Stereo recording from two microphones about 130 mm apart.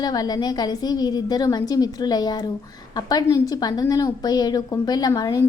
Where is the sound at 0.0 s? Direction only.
30° left (ahead or behind).